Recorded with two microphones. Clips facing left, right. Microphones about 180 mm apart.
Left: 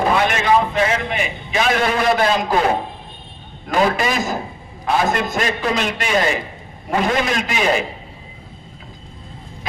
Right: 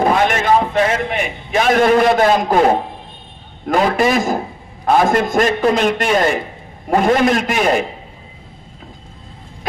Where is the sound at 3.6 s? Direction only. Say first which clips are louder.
Right 3 dB; 50° right (ahead or behind).